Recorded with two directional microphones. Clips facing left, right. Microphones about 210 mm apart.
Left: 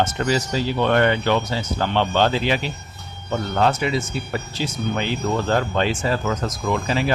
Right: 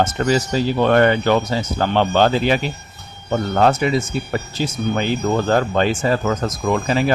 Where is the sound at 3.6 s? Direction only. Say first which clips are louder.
Right 4 dB; 45° right (ahead or behind).